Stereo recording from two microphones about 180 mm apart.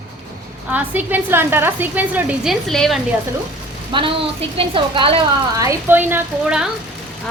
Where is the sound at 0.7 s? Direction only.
10° right (ahead or behind).